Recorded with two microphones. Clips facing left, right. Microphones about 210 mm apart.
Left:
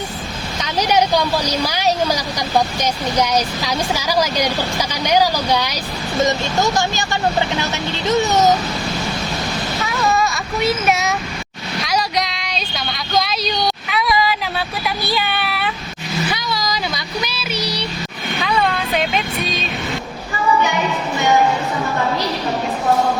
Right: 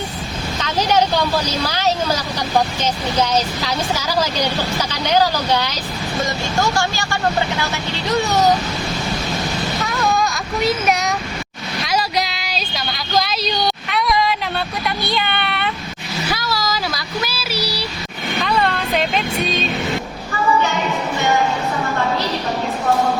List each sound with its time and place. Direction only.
0.6 s speech: 10° left (ahead or behind)
9.8 s child singing: centre (ahead or behind)
11.8 s a sound: centre (ahead or behind)
16.3 s child singing: centre (ahead or behind)